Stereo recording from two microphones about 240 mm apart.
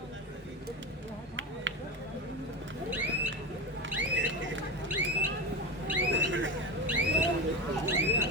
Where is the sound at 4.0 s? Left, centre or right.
Right.